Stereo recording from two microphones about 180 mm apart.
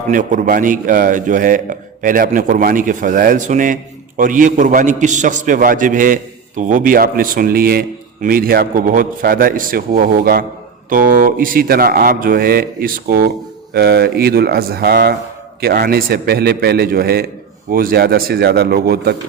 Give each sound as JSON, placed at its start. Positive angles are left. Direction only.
{"t": 0.1, "sound": "a man's voice", "side_deg": -45}